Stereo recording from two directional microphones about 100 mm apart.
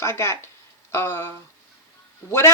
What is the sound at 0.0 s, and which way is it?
Speech, 25° left (ahead or behind).